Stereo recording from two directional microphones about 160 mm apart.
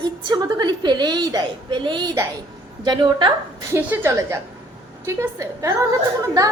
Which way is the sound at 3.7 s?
15° right (ahead or behind).